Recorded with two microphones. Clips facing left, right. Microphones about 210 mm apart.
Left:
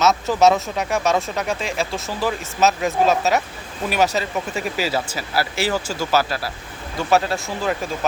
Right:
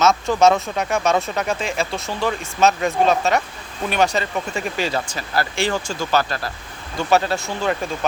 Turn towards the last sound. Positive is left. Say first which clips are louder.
# right 1 dB
turn(degrees=0)  # may be behind; listen again after turning